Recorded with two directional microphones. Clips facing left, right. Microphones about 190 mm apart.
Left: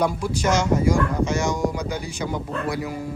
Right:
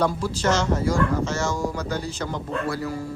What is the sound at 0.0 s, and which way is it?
A man's voice, 15° left (ahead or behind).